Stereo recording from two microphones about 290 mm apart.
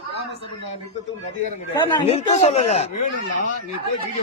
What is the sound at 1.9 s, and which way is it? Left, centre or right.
Speech, left.